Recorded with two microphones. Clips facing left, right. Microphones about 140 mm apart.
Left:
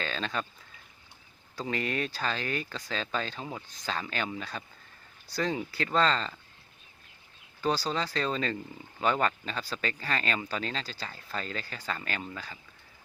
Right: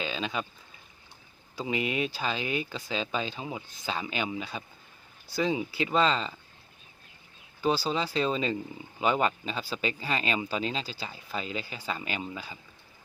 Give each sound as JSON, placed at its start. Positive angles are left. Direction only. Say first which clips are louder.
{"t": 0.0, "sound": "speech", "louder": "right 1 dB", "side_deg": -10}
{"t": 1.5, "sound": "speech", "louder": "right 2 dB", "side_deg": -10}
{"t": 7.6, "sound": "speech", "louder": "right 2 dB", "side_deg": -10}